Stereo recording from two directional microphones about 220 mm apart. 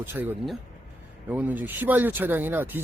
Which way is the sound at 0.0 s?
10° right (ahead or behind).